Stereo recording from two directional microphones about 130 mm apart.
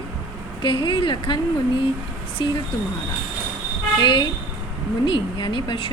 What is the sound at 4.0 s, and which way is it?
A woman's voice, 35° left (ahead or behind).